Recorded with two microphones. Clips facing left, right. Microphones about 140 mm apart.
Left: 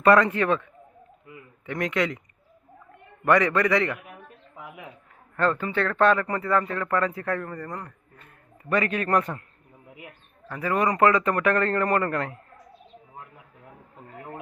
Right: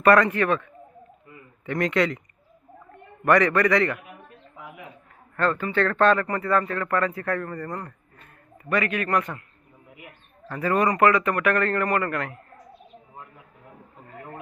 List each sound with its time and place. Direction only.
0.0 s a man's voice: 20° left (ahead or behind)
3.2 s speech: 20° left (ahead or behind)
5.4 s a man's voice: 20° left (ahead or behind)
5.7 s speech: 5° left (ahead or behind)
8.7 s a man's voice: 30° left (ahead or behind)
10.5 s a man's voice: 10° left (ahead or behind); by 12.4 s 30° left (ahead or behind)
14.1 s a sound: 20° left (ahead or behind)